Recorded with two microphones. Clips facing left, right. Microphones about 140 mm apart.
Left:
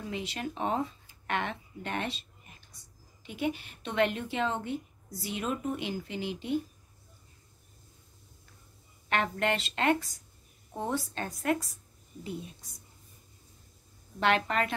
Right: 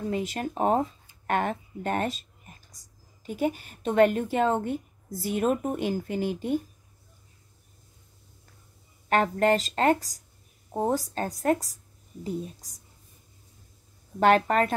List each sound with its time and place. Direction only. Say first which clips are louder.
0.1 s a woman's voice: right 6 dB; 45° right (ahead or behind)
9.1 s speech: right 7 dB; 40° right (ahead or behind)
14.2 s a woman's voice: right 7 dB; 45° right (ahead or behind)